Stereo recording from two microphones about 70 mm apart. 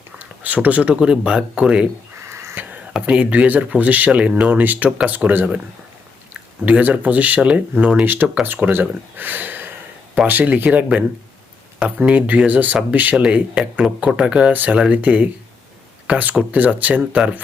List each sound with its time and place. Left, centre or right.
0.2 s speech: right
2.6 s a sound: right
2.9 s speech: centre